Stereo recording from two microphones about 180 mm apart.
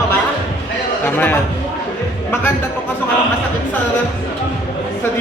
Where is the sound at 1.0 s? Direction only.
10° left (ahead or behind).